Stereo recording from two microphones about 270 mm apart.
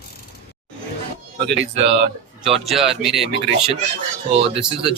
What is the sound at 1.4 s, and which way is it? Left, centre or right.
Speech, right.